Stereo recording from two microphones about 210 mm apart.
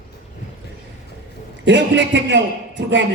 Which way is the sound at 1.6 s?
55° right (ahead or behind).